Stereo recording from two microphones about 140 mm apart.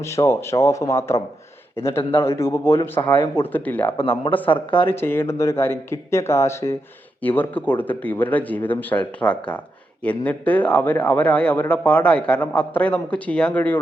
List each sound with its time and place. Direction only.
0.0 s speech: 20° left (ahead or behind)
4.4 s speech: 35° left (ahead or behind)
4.9 s speech: 15° left (ahead or behind)